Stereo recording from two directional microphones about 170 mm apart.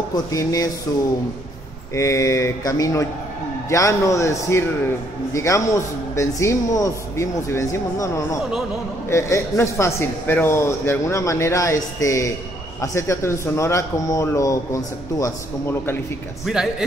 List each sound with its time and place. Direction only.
0.1 s mantra: 20° left (ahead or behind)
3.6 s a man's voice: 20° left (ahead or behind)
16.5 s speech: centre (ahead or behind)